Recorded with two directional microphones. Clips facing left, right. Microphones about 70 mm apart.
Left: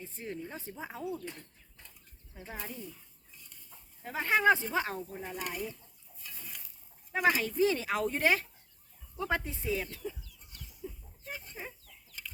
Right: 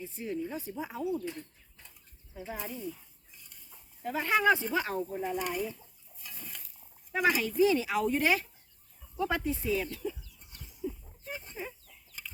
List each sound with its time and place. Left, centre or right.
0.0 s speech: left
1.0 s speech: centre
2.3 s speech: centre
2.6 s speech: centre
4.0 s speech: left
5.2 s pulleys: centre
7.1 s speech: left
11.3 s chicken: right